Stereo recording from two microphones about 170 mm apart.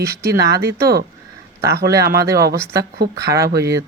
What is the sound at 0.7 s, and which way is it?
Speech, 65° right (ahead or behind).